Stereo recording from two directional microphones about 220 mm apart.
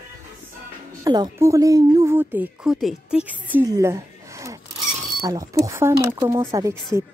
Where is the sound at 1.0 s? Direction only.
15° right (ahead or behind).